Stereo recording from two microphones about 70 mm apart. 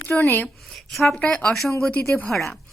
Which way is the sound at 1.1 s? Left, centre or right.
Centre.